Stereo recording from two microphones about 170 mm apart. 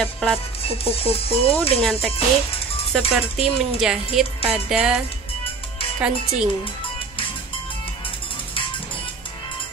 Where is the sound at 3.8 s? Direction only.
5° right (ahead or behind).